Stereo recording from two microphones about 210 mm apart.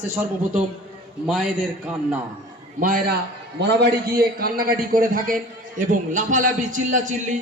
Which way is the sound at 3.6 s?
55° right (ahead or behind).